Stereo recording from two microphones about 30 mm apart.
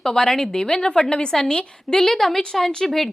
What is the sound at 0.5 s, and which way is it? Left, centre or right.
Speech, left.